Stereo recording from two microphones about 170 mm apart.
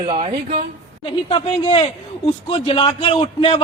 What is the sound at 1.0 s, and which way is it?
Speech, 30° left (ahead or behind).